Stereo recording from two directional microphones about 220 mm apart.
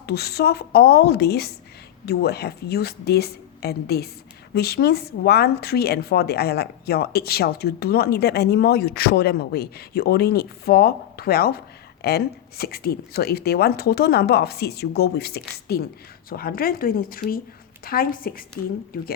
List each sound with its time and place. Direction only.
0.0 s a woman's voice: 45° left (ahead or behind)